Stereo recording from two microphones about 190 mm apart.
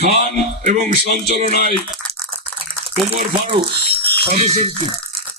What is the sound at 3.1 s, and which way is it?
Speech, 30° right (ahead or behind).